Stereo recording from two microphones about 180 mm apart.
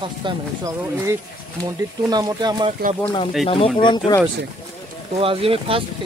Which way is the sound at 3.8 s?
25° left (ahead or behind).